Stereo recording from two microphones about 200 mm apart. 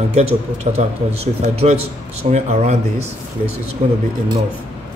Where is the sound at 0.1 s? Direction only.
30° right (ahead or behind).